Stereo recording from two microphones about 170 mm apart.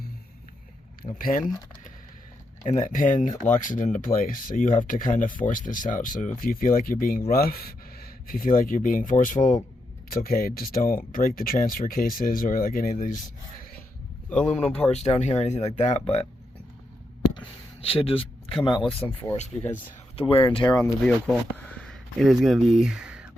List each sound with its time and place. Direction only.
1.2 s speech: 55° left (ahead or behind)
2.6 s speech: 45° left (ahead or behind)
14.3 s speech: 10° left (ahead or behind)
14.8 s speech: 40° left (ahead or behind)
17.3 s a sound: 30° left (ahead or behind)
18.6 s speech: 30° left (ahead or behind)
20.1 s speech: 35° left (ahead or behind)
21.0 s speech: 10° left (ahead or behind)